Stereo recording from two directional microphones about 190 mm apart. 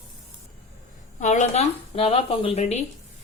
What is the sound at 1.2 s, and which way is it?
A woman's voice, 40° left (ahead or behind).